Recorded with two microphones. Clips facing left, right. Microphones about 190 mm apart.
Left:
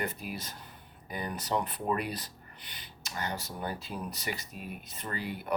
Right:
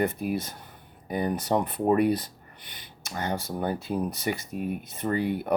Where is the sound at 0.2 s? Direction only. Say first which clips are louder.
Right 11 dB; 50° right (ahead or behind).